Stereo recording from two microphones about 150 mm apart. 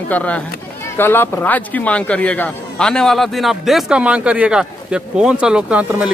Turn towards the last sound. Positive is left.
turn(degrees=-10)  # may be behind; listen again after turning